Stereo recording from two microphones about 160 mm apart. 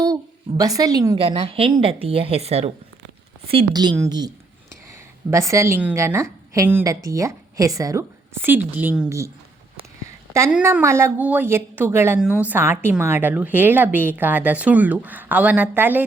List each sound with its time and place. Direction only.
0.0 s a woman's voice: 20° right (ahead or behind); by 2.7 s 40° right (ahead or behind)
3.5 s a woman's voice: 30° right (ahead or behind)
10.6 s a woman's voice: 15° right (ahead or behind)